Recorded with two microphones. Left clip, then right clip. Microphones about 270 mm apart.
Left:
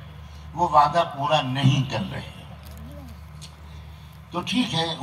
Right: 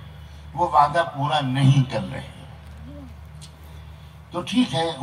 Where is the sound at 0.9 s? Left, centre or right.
Left.